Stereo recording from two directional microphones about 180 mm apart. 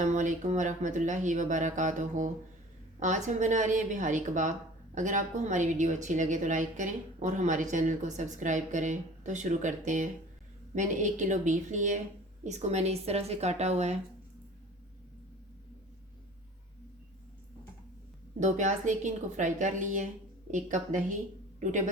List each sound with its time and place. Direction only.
0.0 s a woman's voice: 45° right (ahead or behind)
18.3 s a woman's voice: 40° right (ahead or behind)